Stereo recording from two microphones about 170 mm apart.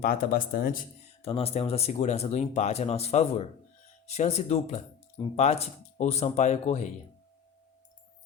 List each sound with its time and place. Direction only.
0.0 s speech: 55° left (ahead or behind)
1.2 s speech: 35° left (ahead or behind)